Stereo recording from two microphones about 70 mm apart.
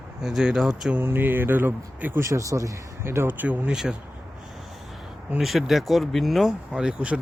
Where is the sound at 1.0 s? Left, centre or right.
Right.